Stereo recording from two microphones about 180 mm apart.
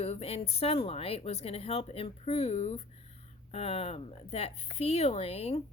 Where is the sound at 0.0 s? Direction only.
35° left (ahead or behind).